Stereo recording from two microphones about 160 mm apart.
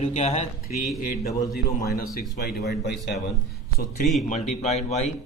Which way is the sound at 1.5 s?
70° left (ahead or behind).